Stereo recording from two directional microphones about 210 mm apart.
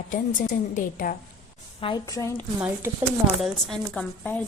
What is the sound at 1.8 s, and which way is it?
Speech, 20° left (ahead or behind).